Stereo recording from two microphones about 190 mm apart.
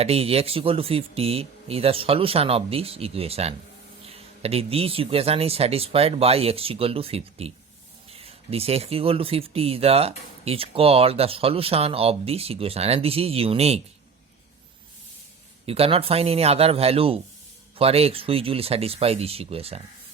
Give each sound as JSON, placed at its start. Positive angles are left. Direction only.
{"t": 0.0, "sound": "speech", "side_deg": -30}
{"t": 15.6, "sound": "speech", "side_deg": -30}